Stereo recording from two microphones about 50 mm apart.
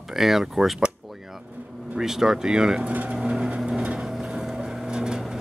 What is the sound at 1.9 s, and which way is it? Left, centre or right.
Speech, centre.